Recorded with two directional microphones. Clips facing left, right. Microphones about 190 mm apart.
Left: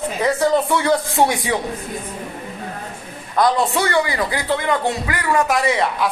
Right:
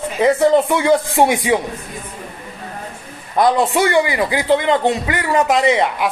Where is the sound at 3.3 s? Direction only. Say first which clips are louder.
Right 3 dB; 20° right (ahead or behind).